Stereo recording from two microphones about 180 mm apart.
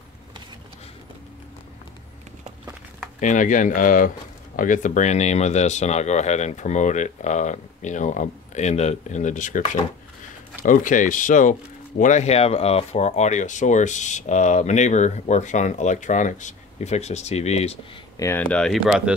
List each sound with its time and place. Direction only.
3.2 s speech: 45° left (ahead or behind)
18.1 s speech: 15° left (ahead or behind); by 19.1 s 5° right (ahead or behind)